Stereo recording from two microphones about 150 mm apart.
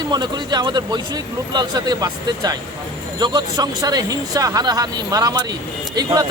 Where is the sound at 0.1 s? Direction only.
30° right (ahead or behind).